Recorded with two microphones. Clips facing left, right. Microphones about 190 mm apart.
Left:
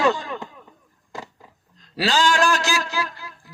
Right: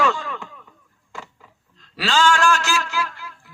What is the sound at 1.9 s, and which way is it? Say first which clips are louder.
A man's voice: even; 35° left (ahead or behind).